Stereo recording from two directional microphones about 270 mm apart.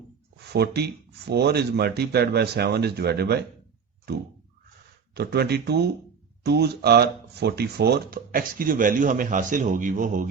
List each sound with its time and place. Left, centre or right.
0.5 s speech: right